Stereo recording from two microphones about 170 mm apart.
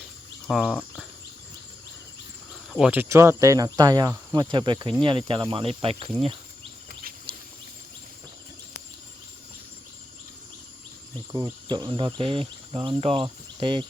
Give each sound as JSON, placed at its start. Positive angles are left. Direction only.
{"t": 0.4, "sound": "speech", "side_deg": 0}
{"t": 2.6, "sound": "speech", "side_deg": -5}
{"t": 11.3, "sound": "speech", "side_deg": -20}